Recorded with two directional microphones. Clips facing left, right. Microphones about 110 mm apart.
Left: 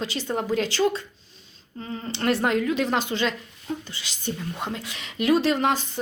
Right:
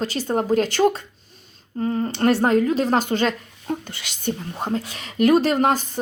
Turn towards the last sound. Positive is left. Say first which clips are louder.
# right 4 dB
turn(degrees=-45)  # may be behind; listen again after turning